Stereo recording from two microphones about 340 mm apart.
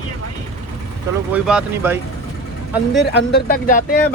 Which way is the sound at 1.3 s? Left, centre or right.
Centre.